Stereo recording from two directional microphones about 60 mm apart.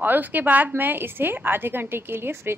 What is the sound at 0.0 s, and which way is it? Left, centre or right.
Speech, right.